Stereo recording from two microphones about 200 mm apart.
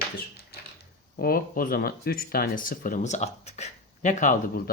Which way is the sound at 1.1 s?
50° left (ahead or behind).